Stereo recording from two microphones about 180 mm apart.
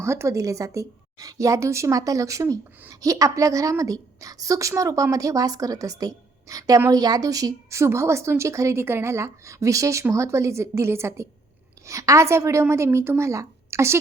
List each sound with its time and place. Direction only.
0.0 s a woman's voice: 15° right (ahead or behind)